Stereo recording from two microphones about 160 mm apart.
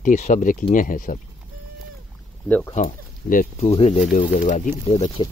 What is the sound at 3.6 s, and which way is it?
Speech, 40° left (ahead or behind).